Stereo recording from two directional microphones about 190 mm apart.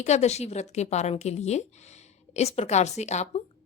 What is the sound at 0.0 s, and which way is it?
Speech, 35° left (ahead or behind).